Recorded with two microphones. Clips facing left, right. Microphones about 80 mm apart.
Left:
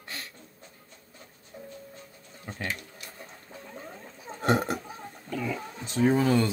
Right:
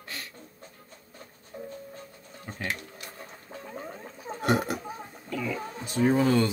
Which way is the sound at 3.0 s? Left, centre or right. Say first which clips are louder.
Right 2 dB; right.